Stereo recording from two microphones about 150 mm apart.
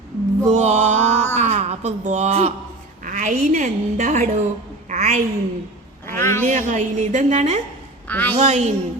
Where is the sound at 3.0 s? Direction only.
60° right (ahead or behind).